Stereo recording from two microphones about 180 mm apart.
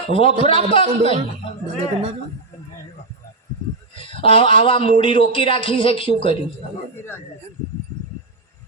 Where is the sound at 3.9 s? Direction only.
30° left (ahead or behind).